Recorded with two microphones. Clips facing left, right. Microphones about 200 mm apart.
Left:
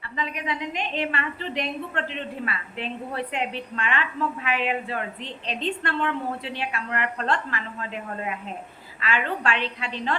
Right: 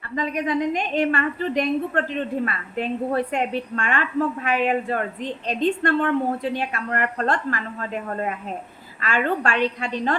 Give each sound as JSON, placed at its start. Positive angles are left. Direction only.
{"t": 0.2, "sound": "a woman's voice", "side_deg": -45}